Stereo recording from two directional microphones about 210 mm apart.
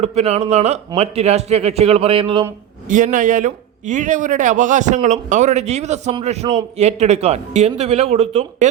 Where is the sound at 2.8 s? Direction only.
40° right (ahead or behind).